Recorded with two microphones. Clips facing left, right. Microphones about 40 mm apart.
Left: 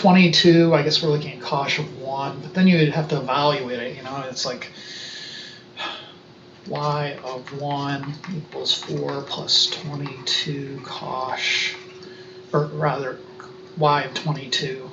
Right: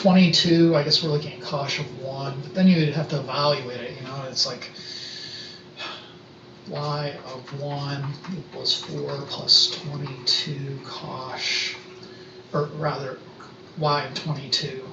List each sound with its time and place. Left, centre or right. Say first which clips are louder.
0.0 s speech: left 4 dB; left
12.8 s speech: left 4 dB; left